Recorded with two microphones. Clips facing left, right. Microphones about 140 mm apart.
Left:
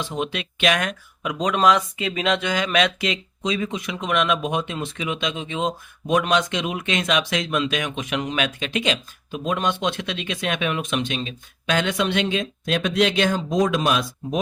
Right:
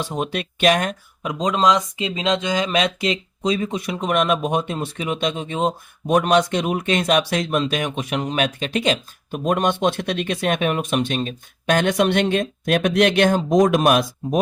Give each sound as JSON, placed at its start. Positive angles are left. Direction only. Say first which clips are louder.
{"t": 0.0, "sound": "speech", "louder": "right 2 dB", "side_deg": -45}